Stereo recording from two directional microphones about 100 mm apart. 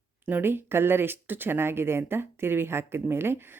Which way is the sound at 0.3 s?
20° right (ahead or behind).